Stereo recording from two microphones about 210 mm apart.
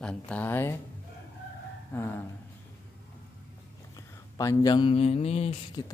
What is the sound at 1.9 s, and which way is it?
Speech, 10° left (ahead or behind).